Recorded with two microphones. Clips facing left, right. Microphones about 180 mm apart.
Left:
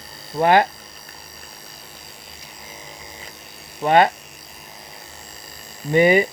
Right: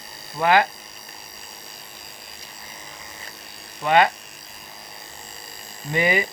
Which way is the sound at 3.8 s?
40° left (ahead or behind).